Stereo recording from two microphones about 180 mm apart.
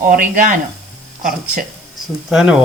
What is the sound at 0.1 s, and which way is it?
Speech, 50° right (ahead or behind).